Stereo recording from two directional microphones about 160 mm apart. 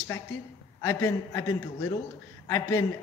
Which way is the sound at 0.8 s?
20° left (ahead or behind).